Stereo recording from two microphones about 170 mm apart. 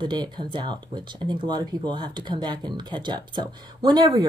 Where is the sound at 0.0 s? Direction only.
25° right (ahead or behind).